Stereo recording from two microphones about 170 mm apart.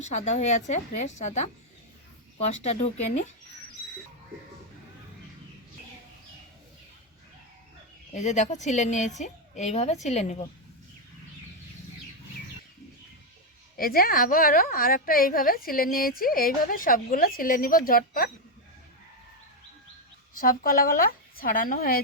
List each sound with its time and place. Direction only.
0.0 s a woman's voice: 40° left (ahead or behind)
2.5 s speech: 40° left (ahead or behind)
8.1 s a woman's voice: 45° left (ahead or behind)
13.7 s a woman's voice: 60° left (ahead or behind)
20.4 s a woman's voice: 55° left (ahead or behind)